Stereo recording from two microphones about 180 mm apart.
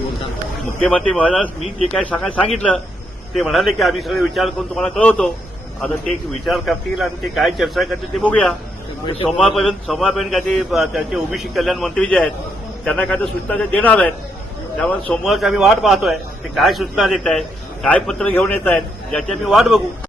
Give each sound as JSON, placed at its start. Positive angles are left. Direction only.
{"t": 0.6, "sound": "a man's voice", "side_deg": 5}
{"t": 9.1, "sound": "a man's voice", "side_deg": 30}
{"t": 9.6, "sound": "a man's voice", "side_deg": 0}